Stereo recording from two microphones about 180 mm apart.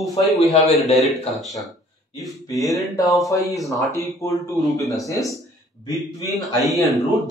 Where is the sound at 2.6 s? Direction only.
Centre (ahead or behind).